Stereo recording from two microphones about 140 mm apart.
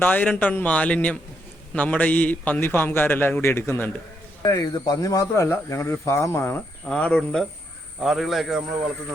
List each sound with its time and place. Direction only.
0.0 s a man's voice: 10° left (ahead or behind)